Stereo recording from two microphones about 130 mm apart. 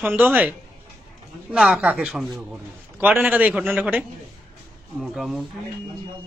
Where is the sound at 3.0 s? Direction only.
15° right (ahead or behind).